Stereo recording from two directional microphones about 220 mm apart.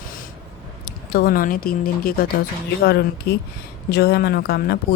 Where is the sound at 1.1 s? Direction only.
40° left (ahead or behind).